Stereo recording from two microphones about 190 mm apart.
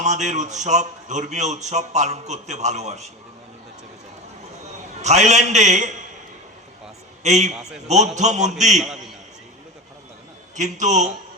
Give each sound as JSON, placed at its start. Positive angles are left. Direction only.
{"t": 0.0, "sound": "speech", "side_deg": -40}
{"t": 5.0, "sound": "speech", "side_deg": -35}
{"t": 7.2, "sound": "a man's voice", "side_deg": -35}
{"t": 10.5, "sound": "speech", "side_deg": -40}